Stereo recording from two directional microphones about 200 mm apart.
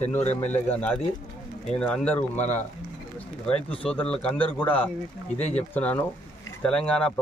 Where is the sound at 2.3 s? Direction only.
35° left (ahead or behind).